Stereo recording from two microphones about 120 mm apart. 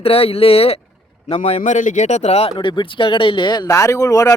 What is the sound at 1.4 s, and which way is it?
Speech, 75° left (ahead or behind).